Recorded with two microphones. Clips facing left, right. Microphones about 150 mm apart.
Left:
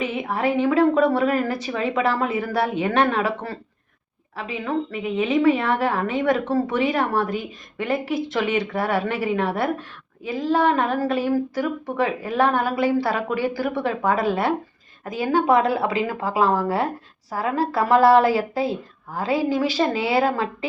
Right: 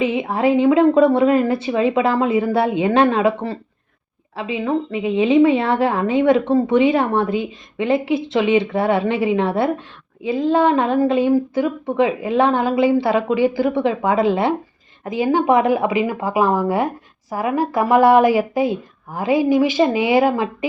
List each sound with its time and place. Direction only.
0.0 s a woman's voice: 30° right (ahead or behind)